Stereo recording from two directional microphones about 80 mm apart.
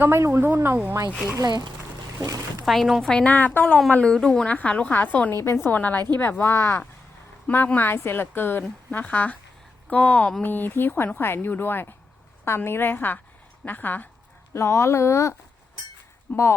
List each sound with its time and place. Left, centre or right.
0.0 s a woman's voice: right
2.1 s speech: right
2.6 s a woman's voice: centre
3.3 s a woman's voice: centre
5.3 s speech: left
5.6 s a woman's voice: centre
7.4 s a woman's voice: left
14.5 s speech: left
16.3 s a woman's voice: left